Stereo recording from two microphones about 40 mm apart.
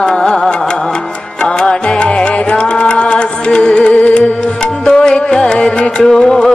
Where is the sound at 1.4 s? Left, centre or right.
Left.